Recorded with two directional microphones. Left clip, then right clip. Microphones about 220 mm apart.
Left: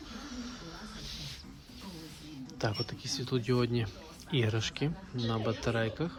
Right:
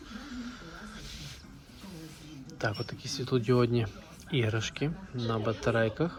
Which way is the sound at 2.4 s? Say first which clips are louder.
Right 2 dB; 20° left (ahead or behind).